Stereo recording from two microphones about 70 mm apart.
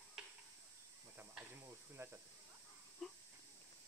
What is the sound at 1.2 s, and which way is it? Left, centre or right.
Cricket, right.